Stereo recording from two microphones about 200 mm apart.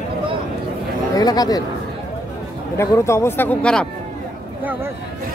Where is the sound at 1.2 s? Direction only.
20° left (ahead or behind).